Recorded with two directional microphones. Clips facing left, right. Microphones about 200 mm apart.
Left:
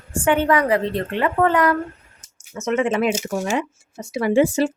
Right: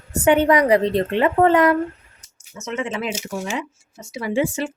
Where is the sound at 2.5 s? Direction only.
55° left (ahead or behind); by 4.7 s 40° left (ahead or behind).